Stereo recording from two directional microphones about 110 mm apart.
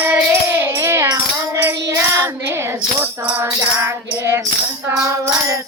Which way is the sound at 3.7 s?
25° right (ahead or behind).